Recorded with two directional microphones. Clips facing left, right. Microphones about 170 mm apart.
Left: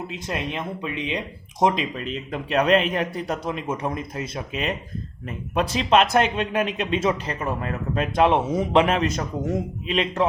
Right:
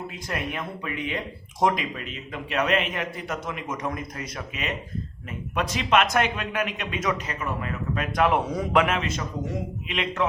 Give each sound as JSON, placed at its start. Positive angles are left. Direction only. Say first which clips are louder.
{"t": 0.1, "sound": "speech", "louder": "left 2 dB", "side_deg": 20}
{"t": 2.3, "sound": "a man's voice", "louder": "left 5 dB", "side_deg": 35}
{"t": 8.1, "sound": "a man's voice", "louder": "left 3 dB", "side_deg": 25}